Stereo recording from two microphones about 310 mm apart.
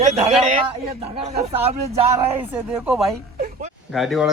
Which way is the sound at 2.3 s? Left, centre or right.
Centre.